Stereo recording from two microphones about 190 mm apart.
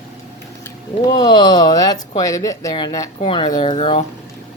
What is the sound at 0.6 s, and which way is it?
Speech, 20° left (ahead or behind).